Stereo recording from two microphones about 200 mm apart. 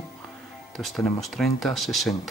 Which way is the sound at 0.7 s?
Centre (ahead or behind).